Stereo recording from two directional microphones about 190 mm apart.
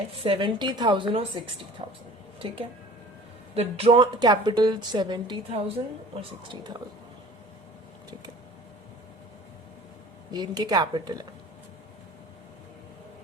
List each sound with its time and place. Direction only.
0.1 s a woman's voice: 30° right (ahead or behind)
1.8 s speech: 40° right (ahead or behind)
3.5 s a woman's voice: 35° right (ahead or behind)
10.3 s a woman's voice: 20° right (ahead or behind)